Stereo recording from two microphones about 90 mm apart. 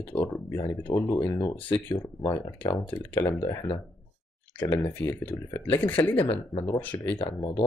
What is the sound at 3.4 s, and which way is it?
Speech, 60° left (ahead or behind).